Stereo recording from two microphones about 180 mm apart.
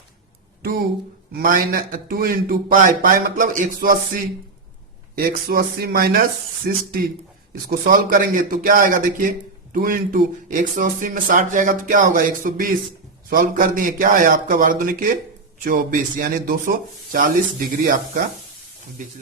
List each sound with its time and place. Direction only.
0.6 s speech: 55° right (ahead or behind)